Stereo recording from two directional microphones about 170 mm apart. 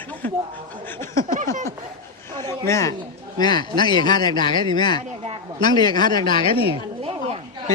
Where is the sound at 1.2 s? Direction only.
50° right (ahead or behind).